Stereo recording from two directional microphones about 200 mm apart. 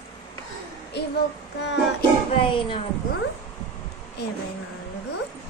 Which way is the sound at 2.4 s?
25° left (ahead or behind).